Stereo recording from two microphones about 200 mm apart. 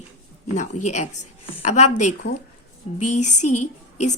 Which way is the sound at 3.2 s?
35° left (ahead or behind).